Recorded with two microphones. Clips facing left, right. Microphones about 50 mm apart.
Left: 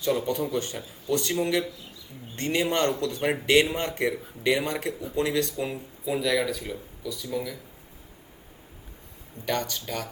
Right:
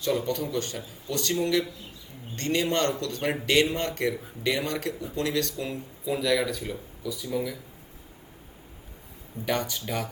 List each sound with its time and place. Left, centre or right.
0.0 s speech: centre
0.3 s a man's voice: centre
6.1 s speech: centre
9.5 s speech: centre